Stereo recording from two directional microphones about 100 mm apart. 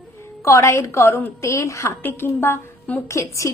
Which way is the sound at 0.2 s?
30° left (ahead or behind).